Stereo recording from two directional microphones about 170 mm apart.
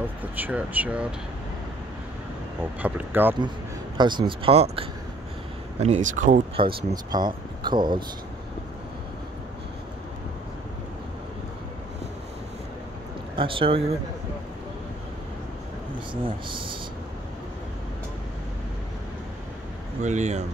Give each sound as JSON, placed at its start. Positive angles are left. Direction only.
{"t": 0.2, "sound": "speech", "side_deg": -10}
{"t": 2.8, "sound": "speech", "side_deg": -10}
{"t": 4.0, "sound": "speech", "side_deg": -25}
{"t": 6.5, "sound": "speech", "side_deg": -25}
{"t": 13.4, "sound": "speech", "side_deg": -30}
{"t": 16.3, "sound": "speech", "side_deg": -30}
{"t": 20.0, "sound": "speech", "side_deg": -45}